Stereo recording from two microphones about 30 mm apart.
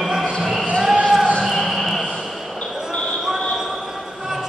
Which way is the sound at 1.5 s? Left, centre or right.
Centre.